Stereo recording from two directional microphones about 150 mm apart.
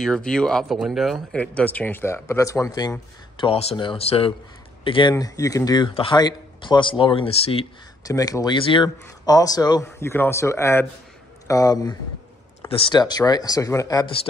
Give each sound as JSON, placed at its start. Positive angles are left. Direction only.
{"t": 0.0, "sound": "speech", "side_deg": 5}
{"t": 1.4, "sound": "speech", "side_deg": 10}
{"t": 5.1, "sound": "speech", "side_deg": 25}
{"t": 8.0, "sound": "speech", "side_deg": 25}
{"t": 12.6, "sound": "speech", "side_deg": 35}